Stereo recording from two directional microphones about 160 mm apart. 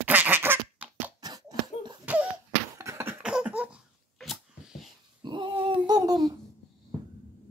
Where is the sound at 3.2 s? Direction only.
5° right (ahead or behind).